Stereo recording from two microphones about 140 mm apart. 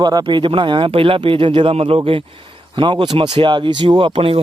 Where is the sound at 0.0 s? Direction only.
30° right (ahead or behind).